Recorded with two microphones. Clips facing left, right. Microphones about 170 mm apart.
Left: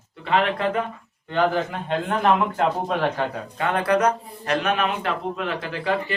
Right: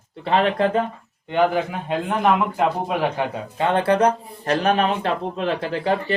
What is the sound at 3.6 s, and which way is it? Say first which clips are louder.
Speech: right 3 dB; 25° right (ahead or behind).